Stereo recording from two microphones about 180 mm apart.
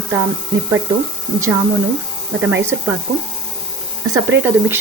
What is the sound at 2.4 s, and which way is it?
Speech, 10° right (ahead or behind).